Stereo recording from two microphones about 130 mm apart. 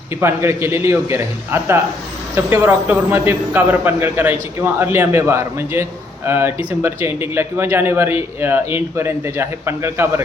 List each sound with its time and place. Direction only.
0.2 s a man's voice: 20° right (ahead or behind)